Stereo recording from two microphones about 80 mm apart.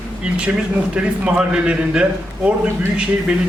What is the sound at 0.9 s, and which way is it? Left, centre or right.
A man's voice, centre.